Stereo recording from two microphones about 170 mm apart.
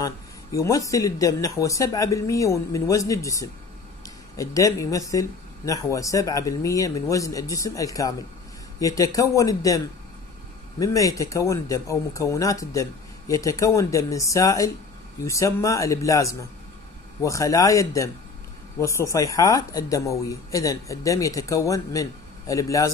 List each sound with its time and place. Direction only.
0.0 s speech: 20° left (ahead or behind)
10.8 s speech: 20° left (ahead or behind)